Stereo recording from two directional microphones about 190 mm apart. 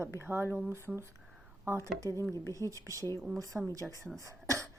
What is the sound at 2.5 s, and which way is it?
A woman's voice, 15° right (ahead or behind).